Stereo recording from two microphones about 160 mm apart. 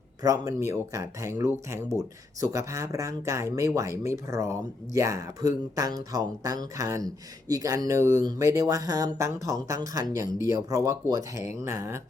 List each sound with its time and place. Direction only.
0.2 s speech: 20° right (ahead or behind)